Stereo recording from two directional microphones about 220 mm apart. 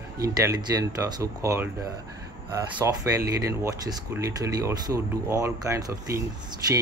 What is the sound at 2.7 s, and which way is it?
Speech, 10° right (ahead or behind).